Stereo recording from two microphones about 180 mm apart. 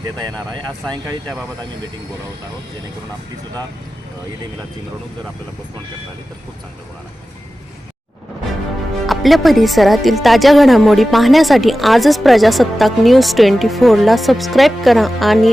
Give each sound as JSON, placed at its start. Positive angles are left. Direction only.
{"t": 0.9, "sound": "speech", "side_deg": 5}
{"t": 9.0, "sound": "speech", "side_deg": 0}